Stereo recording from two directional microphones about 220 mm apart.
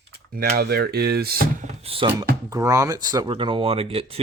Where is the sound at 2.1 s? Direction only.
15° right (ahead or behind).